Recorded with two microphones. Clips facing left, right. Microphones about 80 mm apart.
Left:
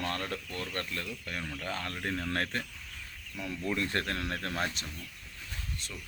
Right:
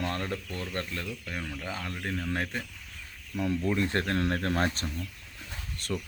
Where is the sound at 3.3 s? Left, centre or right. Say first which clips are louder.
Right 6 dB; right.